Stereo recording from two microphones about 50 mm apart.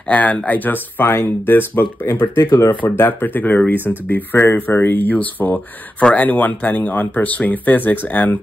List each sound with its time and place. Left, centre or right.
0.1 s speech: left